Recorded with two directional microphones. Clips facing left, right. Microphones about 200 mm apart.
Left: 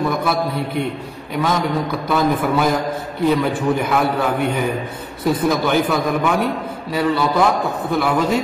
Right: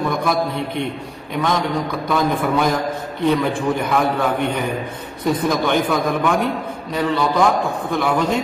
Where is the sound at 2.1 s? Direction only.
5° left (ahead or behind).